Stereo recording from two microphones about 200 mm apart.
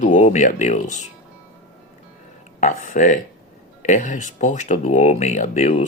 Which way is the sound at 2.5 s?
40° left (ahead or behind).